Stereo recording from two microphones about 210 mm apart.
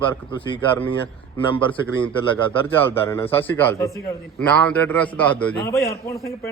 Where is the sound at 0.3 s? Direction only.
25° left (ahead or behind).